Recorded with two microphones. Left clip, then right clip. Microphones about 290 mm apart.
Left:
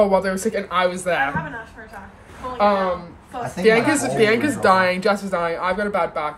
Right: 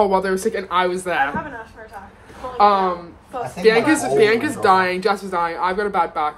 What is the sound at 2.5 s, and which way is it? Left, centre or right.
Speech, centre.